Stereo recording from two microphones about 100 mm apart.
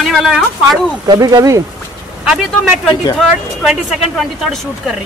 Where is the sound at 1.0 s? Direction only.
40° right (ahead or behind).